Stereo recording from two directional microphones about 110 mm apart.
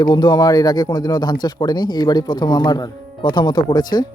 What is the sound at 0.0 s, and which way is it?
Speech, 40° left (ahead or behind).